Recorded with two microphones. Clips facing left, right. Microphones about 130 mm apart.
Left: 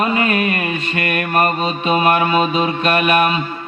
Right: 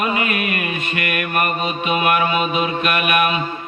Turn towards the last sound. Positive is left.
turn(degrees=30)  # may be behind; listen again after turning